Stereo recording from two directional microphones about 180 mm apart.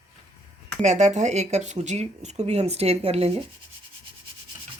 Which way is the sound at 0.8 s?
40° right (ahead or behind).